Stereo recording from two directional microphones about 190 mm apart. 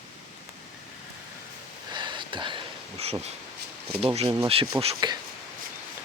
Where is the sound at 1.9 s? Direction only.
25° right (ahead or behind).